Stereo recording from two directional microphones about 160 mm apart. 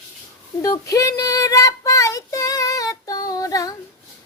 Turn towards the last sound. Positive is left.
turn(degrees=20)  # may be behind; listen again after turning